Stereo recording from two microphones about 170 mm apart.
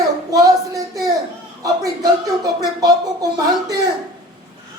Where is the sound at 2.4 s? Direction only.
20° right (ahead or behind).